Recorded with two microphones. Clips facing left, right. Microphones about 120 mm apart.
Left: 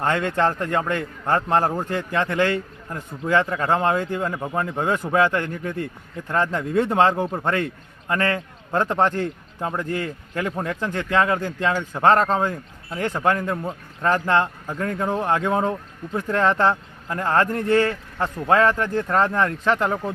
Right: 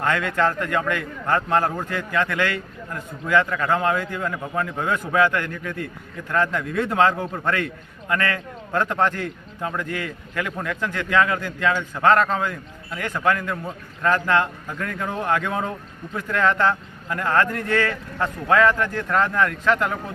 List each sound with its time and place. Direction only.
0.0 s a man's voice: 30° left (ahead or behind)